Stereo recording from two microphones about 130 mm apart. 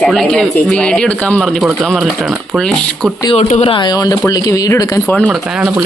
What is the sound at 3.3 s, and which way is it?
Speech, 50° left (ahead or behind).